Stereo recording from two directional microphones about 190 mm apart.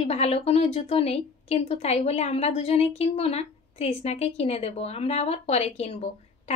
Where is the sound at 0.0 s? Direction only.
35° left (ahead or behind).